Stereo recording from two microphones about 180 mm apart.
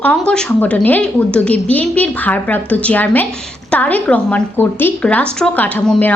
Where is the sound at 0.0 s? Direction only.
5° left (ahead or behind).